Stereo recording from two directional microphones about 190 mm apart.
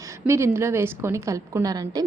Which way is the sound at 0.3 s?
15° right (ahead or behind).